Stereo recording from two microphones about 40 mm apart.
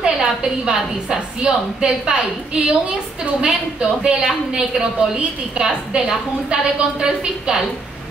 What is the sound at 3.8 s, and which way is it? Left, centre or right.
A woman's voice, right.